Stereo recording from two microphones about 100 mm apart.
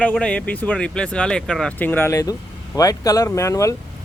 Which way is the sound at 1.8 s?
20° left (ahead or behind).